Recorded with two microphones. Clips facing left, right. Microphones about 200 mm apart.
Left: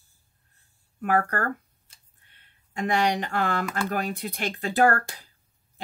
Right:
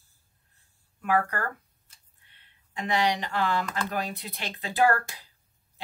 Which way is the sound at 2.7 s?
50° left (ahead or behind).